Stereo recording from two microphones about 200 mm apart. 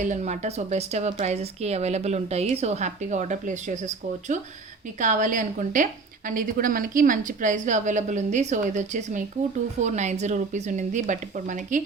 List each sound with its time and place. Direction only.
0.0 s speech: 35° right (ahead or behind)